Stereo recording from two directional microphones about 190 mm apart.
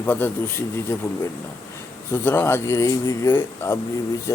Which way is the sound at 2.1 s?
10° left (ahead or behind).